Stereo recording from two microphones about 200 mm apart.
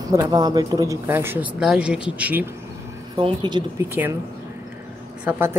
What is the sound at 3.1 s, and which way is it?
A woman's voice, 20° right (ahead or behind).